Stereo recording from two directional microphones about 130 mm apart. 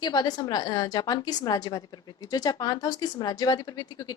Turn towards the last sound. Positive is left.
turn(degrees=30)  # may be behind; listen again after turning